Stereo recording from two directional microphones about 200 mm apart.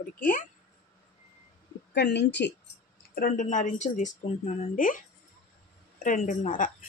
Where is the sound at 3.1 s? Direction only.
45° left (ahead or behind).